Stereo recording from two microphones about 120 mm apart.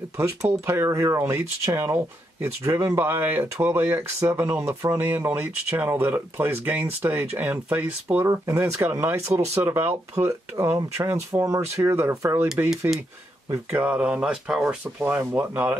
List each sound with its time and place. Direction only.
0.2 s speech: 20° right (ahead or behind)
8.3 s speech: 25° right (ahead or behind)
13.7 s speech: 10° right (ahead or behind)